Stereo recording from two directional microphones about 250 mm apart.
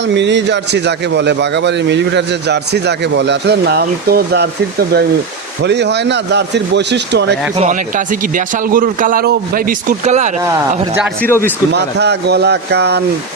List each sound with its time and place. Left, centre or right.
0.1 s speech: right
7.6 s a man's voice: right
11.0 s speech: centre
11.7 s a man's voice: right